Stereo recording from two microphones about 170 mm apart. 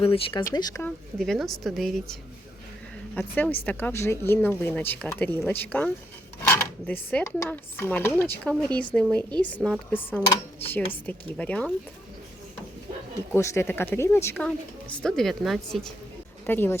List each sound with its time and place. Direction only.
0.0 s speech: 35° left (ahead or behind)
1.2 s a woman's voice: centre (ahead or behind)
3.2 s speech: 10° left (ahead or behind)
13.3 s a woman's voice: 15° left (ahead or behind); by 15.8 s centre (ahead or behind)
16.5 s speech: 10° left (ahead or behind)